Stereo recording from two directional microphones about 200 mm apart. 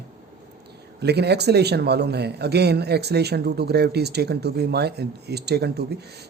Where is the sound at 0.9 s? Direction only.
55° right (ahead or behind).